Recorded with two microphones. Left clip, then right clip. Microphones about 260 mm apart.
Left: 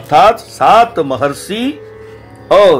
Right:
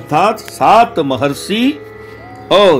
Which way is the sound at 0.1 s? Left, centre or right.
Centre.